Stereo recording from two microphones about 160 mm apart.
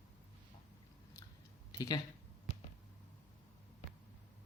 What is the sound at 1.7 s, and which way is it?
Speech, 25° left (ahead or behind).